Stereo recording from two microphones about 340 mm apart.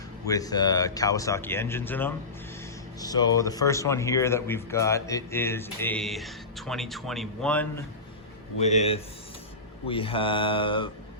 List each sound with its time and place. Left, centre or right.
0.3 s speech: centre
8.5 s speech: centre